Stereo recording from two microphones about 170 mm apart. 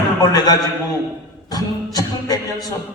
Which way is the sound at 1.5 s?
20° left (ahead or behind).